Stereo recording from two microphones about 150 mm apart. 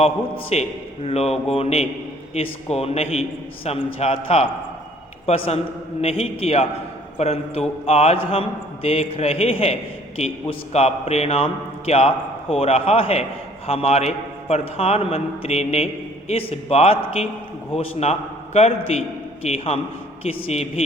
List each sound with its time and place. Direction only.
0.5 s a man's voice: 45° left (ahead or behind)
6.0 s a man's voice: 40° left (ahead or behind)